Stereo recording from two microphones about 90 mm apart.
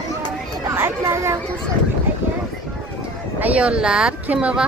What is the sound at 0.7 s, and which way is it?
Speech, 30° right (ahead or behind).